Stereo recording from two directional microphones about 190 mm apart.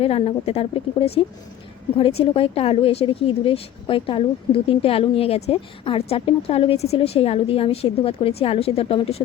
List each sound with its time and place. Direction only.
0.0 s speech: 30° left (ahead or behind)